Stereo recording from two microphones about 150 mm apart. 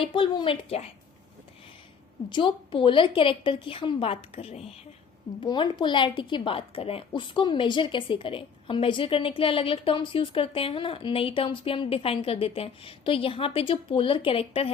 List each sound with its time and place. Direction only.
0.0 s a woman's voice: 35° left (ahead or behind)
2.3 s a woman's voice: 35° left (ahead or behind)